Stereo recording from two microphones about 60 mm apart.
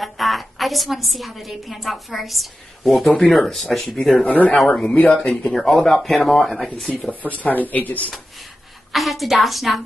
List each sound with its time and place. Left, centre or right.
0.0 s a woman's voice: centre
4.2 s speech: left
4.6 s a woman's voice: centre
4.8 s a woman's voice: left; by 6.9 s centre
7.1 s speech: left
8.9 s a woman's voice: centre